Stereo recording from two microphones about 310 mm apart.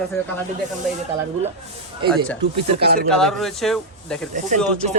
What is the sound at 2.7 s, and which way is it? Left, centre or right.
Speech, right.